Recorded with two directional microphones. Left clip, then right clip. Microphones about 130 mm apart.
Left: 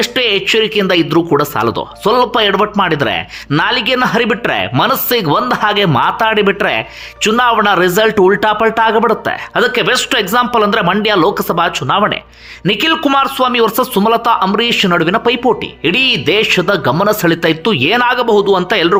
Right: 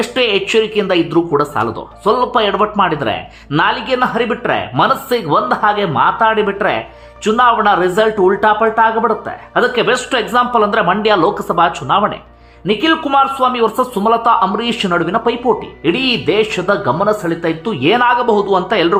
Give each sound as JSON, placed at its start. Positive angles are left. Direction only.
{"t": 0.0, "sound": "a man's voice", "side_deg": 25}